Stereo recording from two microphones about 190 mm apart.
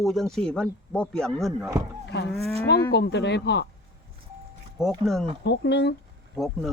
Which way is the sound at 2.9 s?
65° left (ahead or behind).